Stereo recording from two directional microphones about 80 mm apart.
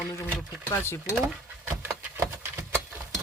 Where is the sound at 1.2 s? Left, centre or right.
Right.